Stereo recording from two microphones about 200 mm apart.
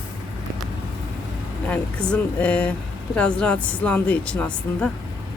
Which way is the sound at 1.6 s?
5° left (ahead or behind).